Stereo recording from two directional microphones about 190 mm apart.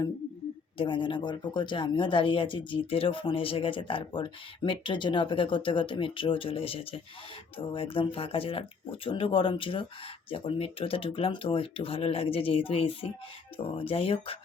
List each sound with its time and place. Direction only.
0.8 s speech: 25° left (ahead or behind)